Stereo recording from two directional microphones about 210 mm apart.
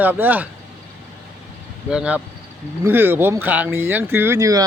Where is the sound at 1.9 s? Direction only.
5° right (ahead or behind).